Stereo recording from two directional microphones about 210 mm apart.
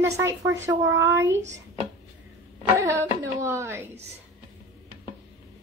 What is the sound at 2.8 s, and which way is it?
A child's voice, 15° right (ahead or behind).